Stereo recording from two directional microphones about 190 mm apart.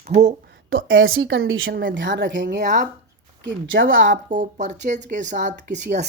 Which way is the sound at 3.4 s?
85° right.